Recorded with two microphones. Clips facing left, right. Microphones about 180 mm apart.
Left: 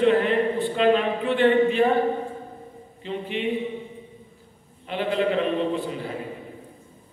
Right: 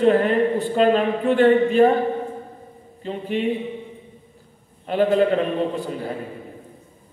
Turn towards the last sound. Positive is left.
turn(degrees=-40)  # may be behind; listen again after turning